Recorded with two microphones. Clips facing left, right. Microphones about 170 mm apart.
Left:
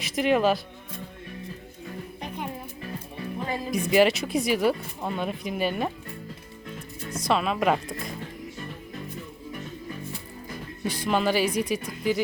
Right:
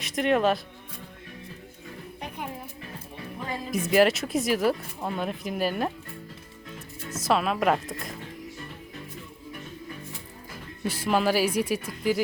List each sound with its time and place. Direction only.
0.0 s speech: centre (ahead or behind)
2.2 s music: 10° right (ahead or behind)
3.7 s speech: 5° right (ahead or behind)
7.1 s speech: 5° right (ahead or behind)
10.8 s speech: 5° right (ahead or behind)